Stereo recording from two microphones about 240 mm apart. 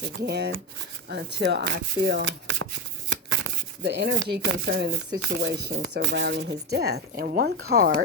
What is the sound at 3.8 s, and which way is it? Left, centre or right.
A woman's voice, right.